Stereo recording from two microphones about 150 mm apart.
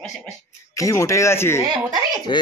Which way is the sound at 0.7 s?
20° left (ahead or behind).